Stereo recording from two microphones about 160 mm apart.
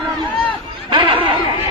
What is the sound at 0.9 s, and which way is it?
Chatter, 30° right (ahead or behind).